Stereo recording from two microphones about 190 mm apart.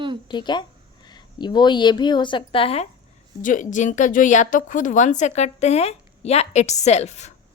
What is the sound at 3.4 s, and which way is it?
A woman's voice, 45° left (ahead or behind).